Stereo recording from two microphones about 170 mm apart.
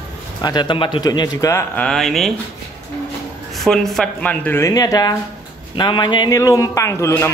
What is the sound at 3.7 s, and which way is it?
A man's voice, 5° left (ahead or behind).